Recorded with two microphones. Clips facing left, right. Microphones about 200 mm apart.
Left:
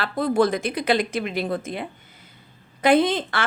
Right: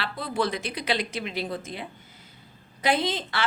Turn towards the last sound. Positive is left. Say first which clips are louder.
# left 8 dB
turn(degrees=55)  # may be behind; listen again after turning